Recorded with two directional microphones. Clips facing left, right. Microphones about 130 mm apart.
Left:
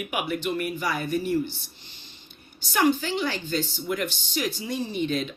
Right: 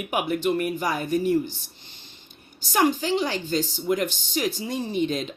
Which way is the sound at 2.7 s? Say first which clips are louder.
Right 1 dB; 35° right (ahead or behind).